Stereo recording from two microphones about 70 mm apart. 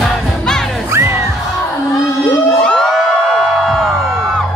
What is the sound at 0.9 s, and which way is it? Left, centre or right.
Music, right.